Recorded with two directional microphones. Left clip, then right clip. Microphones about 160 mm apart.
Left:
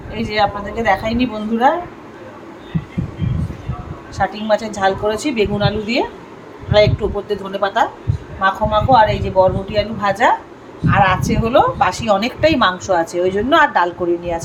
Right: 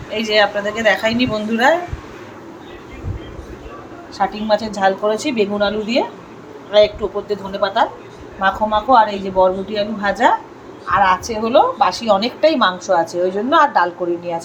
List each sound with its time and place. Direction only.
0.1 s a woman's voice: 35° left (ahead or behind)
4.2 s speech: 5° left (ahead or behind)